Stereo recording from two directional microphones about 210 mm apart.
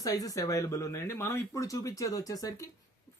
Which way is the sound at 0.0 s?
15° left (ahead or behind).